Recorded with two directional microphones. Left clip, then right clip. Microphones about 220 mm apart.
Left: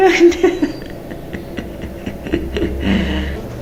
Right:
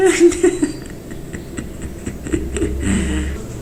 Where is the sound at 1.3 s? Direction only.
5° right (ahead or behind).